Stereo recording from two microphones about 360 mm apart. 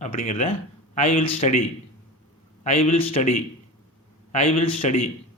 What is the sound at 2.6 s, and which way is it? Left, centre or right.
Speech, centre.